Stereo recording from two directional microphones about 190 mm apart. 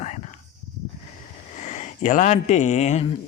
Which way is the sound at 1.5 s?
40° left (ahead or behind).